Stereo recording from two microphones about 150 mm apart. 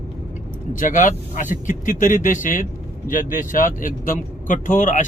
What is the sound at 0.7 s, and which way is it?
A man's voice, 55° left (ahead or behind).